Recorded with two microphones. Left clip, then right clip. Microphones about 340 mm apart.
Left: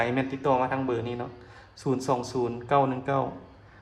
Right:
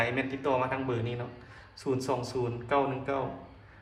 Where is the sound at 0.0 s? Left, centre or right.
Left.